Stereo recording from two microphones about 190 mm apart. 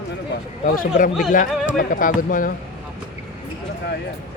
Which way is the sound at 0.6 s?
45° left (ahead or behind).